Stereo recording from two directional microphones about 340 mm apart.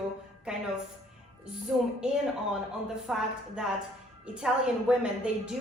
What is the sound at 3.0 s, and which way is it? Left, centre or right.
A woman's voice, centre.